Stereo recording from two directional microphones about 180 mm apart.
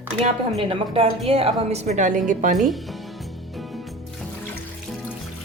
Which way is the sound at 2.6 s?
Centre (ahead or behind).